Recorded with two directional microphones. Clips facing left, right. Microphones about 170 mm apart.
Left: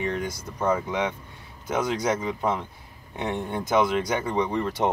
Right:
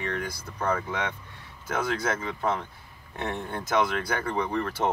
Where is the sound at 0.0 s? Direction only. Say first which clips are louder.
Left 4 dB; 20° left (ahead or behind).